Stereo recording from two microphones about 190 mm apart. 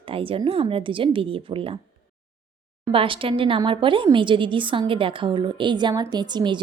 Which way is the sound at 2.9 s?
25° right (ahead or behind).